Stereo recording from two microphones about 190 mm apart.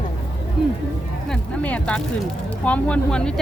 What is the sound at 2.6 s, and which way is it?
Speech, 5° left (ahead or behind).